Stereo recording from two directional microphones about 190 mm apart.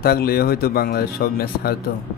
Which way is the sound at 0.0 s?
55° left (ahead or behind).